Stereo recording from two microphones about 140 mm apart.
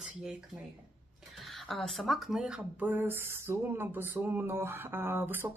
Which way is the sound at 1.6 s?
Centre (ahead or behind).